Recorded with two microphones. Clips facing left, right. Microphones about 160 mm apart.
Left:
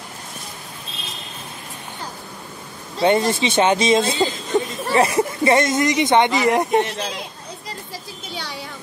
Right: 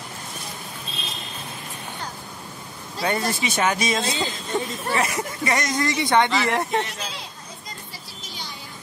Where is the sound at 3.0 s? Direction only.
25° left (ahead or behind).